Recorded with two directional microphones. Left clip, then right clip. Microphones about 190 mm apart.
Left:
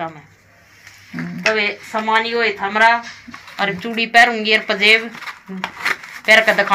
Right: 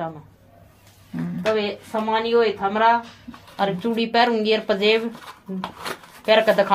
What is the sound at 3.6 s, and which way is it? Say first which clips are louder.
Speech: left 3 dB; 50° right (ahead or behind).